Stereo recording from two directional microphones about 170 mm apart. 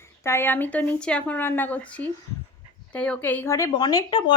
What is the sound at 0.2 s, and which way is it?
A woman's voice, 15° left (ahead or behind).